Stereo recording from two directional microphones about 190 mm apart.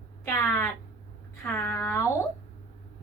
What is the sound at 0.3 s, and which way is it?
Speech, 15° left (ahead or behind).